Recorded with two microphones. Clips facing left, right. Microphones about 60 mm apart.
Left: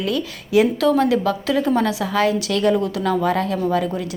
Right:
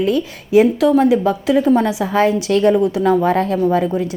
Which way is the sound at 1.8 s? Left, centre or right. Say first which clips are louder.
Right 4 dB; right.